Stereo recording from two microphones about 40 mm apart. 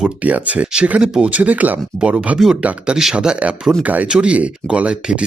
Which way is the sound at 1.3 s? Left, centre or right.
Right.